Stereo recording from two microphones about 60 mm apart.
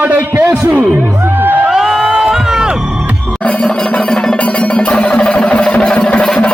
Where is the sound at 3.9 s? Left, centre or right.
Centre.